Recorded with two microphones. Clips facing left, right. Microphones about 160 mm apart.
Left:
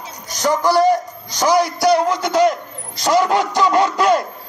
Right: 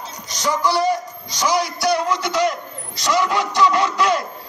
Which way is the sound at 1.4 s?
50° left (ahead or behind).